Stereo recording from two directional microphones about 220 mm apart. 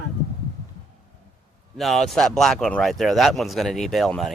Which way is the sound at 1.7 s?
Centre (ahead or behind).